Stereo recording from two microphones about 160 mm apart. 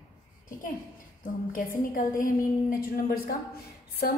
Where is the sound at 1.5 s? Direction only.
60° left (ahead or behind).